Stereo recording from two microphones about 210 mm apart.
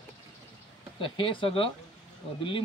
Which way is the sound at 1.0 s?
25° left (ahead or behind).